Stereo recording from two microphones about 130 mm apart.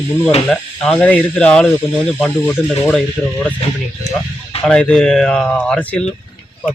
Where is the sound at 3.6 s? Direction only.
50° left (ahead or behind).